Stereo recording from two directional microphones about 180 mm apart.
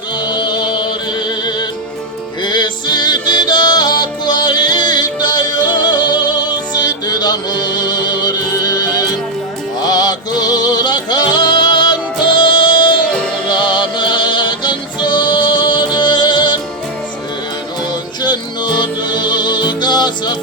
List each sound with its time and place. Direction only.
0.2 s music: 25° left (ahead or behind)
13.1 s music: 5° left (ahead or behind)
13.5 s music: 25° left (ahead or behind)
18.2 s music: 25° left (ahead or behind)